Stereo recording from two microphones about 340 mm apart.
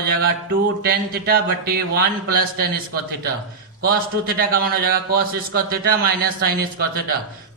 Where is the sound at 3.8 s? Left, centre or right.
Right.